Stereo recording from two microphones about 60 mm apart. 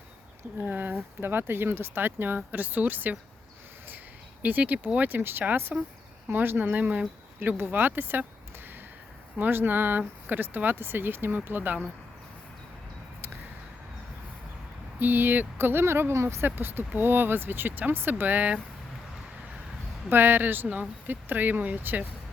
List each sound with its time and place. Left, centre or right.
0.6 s speech: right
4.4 s speech: right
9.4 s speech: right
14.9 s speech: right
16.6 s speech: right
20.1 s speech: right